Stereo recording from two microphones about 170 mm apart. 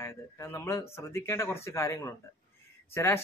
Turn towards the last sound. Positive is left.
turn(degrees=15)  # may be behind; listen again after turning